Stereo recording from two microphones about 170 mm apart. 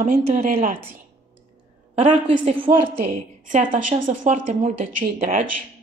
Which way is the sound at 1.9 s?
35° right (ahead or behind).